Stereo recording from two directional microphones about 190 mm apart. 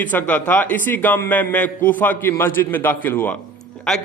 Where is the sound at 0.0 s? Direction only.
10° left (ahead or behind).